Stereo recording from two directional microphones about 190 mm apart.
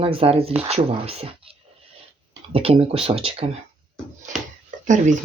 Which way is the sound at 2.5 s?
30° right (ahead or behind).